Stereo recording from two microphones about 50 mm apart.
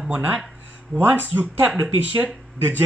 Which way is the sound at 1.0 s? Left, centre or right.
Right.